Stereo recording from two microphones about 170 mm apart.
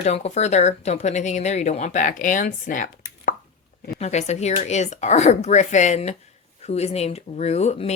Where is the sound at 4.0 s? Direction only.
40° left (ahead or behind).